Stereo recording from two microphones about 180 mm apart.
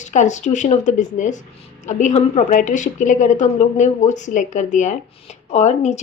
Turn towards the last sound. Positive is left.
turn(degrees=40)  # may be behind; listen again after turning